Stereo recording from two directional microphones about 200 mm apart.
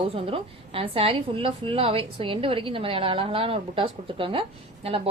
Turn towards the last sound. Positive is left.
turn(degrees=-30)  # may be behind; listen again after turning